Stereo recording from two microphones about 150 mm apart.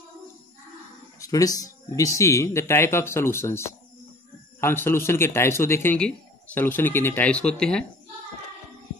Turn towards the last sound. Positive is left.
turn(degrees=5)  # may be behind; listen again after turning